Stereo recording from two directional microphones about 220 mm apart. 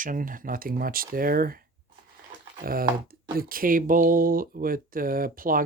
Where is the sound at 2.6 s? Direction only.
40° right (ahead or behind).